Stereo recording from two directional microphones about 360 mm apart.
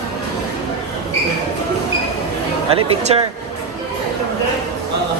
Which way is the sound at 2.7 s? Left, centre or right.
Centre.